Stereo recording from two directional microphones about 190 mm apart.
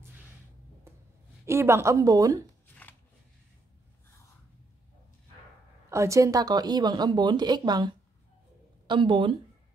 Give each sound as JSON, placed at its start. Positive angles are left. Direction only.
{"t": 1.4, "sound": "speech", "side_deg": -15}
{"t": 2.7, "sound": "shuffling cards", "side_deg": 10}
{"t": 5.9, "sound": "speech", "side_deg": -15}